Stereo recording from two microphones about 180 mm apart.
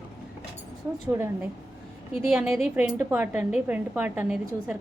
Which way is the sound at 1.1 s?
15° right (ahead or behind).